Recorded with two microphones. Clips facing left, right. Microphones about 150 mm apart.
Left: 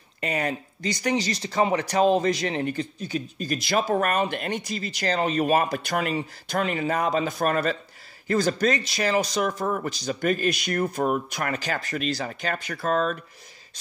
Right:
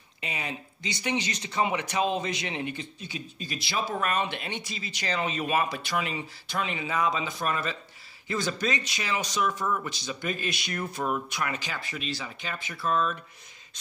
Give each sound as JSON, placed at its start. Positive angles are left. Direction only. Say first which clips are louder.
{"t": 0.2, "sound": "speech", "louder": "left 9 dB", "side_deg": 50}